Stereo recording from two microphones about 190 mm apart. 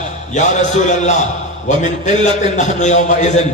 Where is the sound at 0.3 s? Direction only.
40° left (ahead or behind).